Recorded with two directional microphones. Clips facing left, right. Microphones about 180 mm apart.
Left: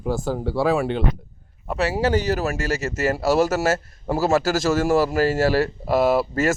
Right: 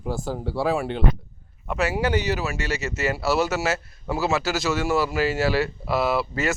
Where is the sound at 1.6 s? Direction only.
30° left (ahead or behind).